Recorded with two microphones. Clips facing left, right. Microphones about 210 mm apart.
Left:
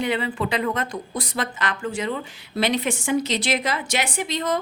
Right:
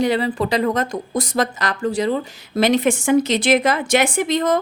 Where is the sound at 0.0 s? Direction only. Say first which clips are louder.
Right 6 dB; 40° right (ahead or behind).